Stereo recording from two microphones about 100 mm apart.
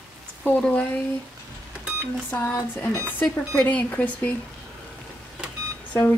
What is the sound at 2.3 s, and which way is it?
Speech, 15° left (ahead or behind).